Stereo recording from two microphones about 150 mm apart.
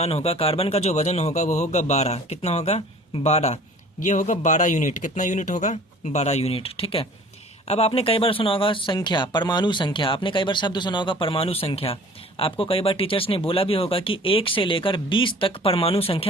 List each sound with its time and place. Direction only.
0.0 s speech: 45° left (ahead or behind)